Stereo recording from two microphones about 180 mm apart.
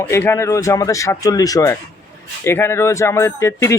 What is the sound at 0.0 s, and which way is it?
Speech, 15° left (ahead or behind).